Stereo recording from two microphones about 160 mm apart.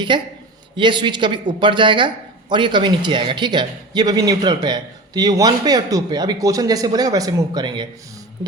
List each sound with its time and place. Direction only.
0.1 s speech: 30° right (ahead or behind)